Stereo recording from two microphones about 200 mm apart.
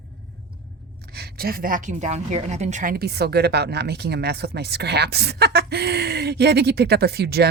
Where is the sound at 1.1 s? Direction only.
50° right (ahead or behind).